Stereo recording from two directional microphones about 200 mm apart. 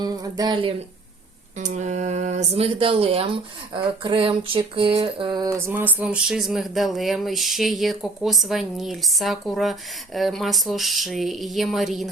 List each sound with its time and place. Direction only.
0.0 s speech: 20° right (ahead or behind)
1.5 s speech: 35° right (ahead or behind); by 9.7 s centre (ahead or behind)
10.2 s a sound: centre (ahead or behind)